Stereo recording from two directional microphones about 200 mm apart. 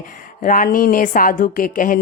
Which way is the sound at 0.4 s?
45° left (ahead or behind).